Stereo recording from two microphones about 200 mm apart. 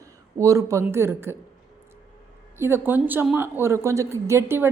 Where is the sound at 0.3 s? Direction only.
15° right (ahead or behind).